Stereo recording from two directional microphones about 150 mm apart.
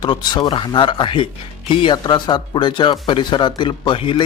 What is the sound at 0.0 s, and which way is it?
Speech, 30° left (ahead or behind).